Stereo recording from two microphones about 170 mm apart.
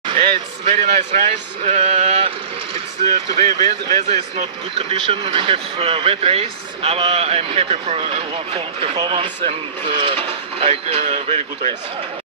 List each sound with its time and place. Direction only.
0.0 s speech: 30° right (ahead or behind)